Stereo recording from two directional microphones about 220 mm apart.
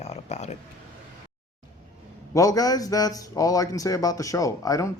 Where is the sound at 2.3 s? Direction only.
15° left (ahead or behind).